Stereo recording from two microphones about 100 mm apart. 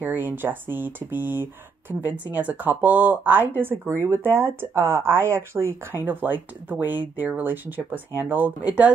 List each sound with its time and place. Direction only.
0.0 s speech: 20° right (ahead or behind)